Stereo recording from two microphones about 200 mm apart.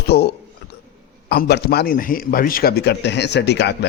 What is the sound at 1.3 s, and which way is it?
A man's voice, 50° left (ahead or behind).